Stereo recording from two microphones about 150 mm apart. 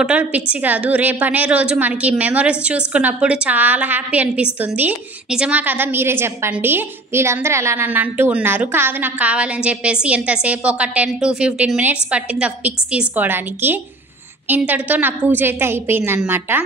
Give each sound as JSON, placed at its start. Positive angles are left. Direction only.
{"t": 0.0, "sound": "a woman's voice", "side_deg": -10}